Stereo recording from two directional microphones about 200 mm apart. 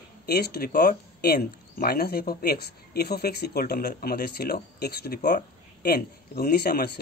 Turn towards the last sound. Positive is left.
turn(degrees=50)  # may be behind; listen again after turning